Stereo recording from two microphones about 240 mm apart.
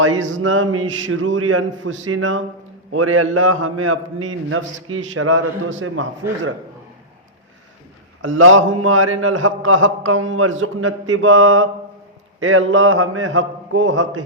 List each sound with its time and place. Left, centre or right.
0.2 s a man's voice: right
8.2 s a man's voice: right